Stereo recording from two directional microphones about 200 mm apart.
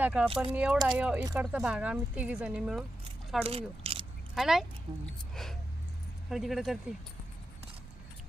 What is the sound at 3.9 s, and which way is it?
Biting, 30° right (ahead or behind).